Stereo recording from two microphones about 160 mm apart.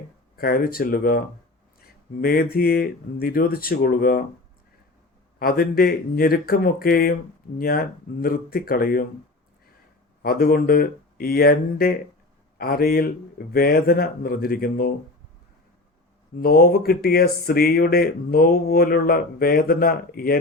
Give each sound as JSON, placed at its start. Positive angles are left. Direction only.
{"t": 0.3, "sound": "speech", "side_deg": 70}
{"t": 2.2, "sound": "speech", "side_deg": 70}
{"t": 5.4, "sound": "speech", "side_deg": 70}
{"t": 10.2, "sound": "speech", "side_deg": 70}
{"t": 16.4, "sound": "speech", "side_deg": 70}